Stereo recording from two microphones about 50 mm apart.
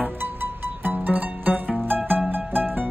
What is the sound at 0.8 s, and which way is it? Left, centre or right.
Music, right.